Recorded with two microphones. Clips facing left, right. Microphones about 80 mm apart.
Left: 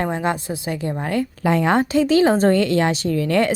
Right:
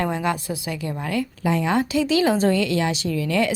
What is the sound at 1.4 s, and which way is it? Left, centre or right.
Speech, left.